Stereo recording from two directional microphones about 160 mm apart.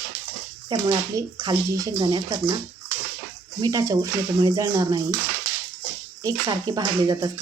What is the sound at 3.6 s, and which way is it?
Speech, 20° right (ahead or behind).